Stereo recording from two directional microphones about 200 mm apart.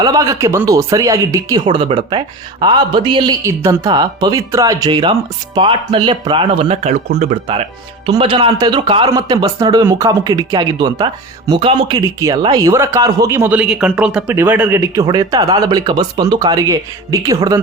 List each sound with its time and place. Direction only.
0.0 s a man's voice: 15° right (ahead or behind); by 7.3 s 35° right (ahead or behind)
8.0 s a man's voice: 25° right (ahead or behind)